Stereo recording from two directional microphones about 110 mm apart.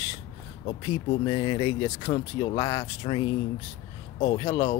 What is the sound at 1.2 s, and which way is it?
Speech, 45° left (ahead or behind).